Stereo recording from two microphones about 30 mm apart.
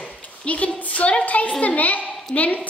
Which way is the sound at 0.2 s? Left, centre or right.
Left.